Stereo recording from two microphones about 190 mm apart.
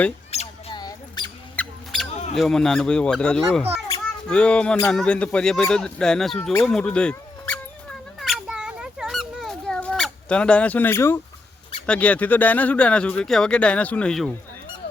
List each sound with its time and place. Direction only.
0.3 s rodents: 35° left (ahead or behind)
0.8 s rodents: 20° left (ahead or behind)
1.5 s mouse: centre (ahead or behind)
2.3 s speech: centre (ahead or behind)
8.2 s a sound: centre (ahead or behind)
11.9 s speech: 5° left (ahead or behind)